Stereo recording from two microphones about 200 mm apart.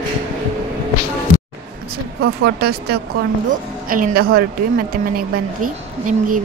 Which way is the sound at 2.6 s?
50° right (ahead or behind).